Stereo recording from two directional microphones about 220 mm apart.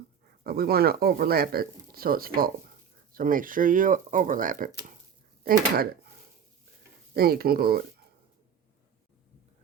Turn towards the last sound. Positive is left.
turn(degrees=-45)  # may be behind; listen again after turning